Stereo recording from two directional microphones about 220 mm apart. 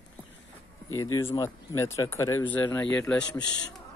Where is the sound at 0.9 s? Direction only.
70° left (ahead or behind).